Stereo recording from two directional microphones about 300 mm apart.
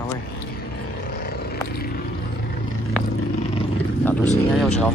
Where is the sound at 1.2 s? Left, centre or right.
Left.